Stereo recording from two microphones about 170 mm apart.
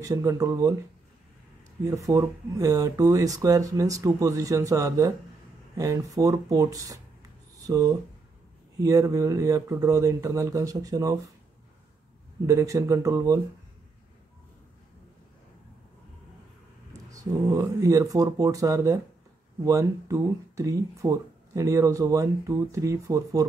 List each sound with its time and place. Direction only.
0.0 s speech: 20° right (ahead or behind)
1.9 s speech: 20° right (ahead or behind)
12.4 s speech: 20° right (ahead or behind)
17.1 s speech: 20° right (ahead or behind)